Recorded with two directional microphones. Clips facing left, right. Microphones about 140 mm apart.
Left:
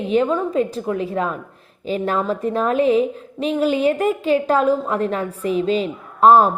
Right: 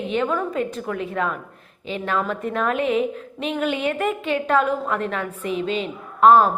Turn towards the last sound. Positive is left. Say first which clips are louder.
# left 2 dB
turn(degrees=40)  # may be behind; listen again after turning